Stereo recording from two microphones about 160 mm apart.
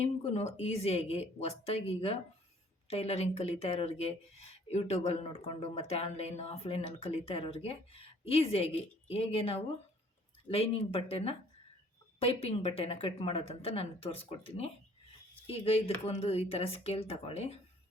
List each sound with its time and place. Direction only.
0.0 s speech: 40° left (ahead or behind)